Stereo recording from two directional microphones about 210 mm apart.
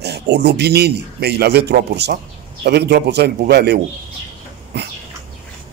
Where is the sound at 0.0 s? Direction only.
50° right (ahead or behind).